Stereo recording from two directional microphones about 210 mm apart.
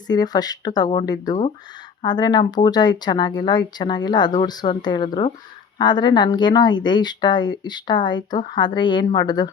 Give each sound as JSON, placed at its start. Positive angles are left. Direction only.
{"t": 0.1, "sound": "speech", "side_deg": 20}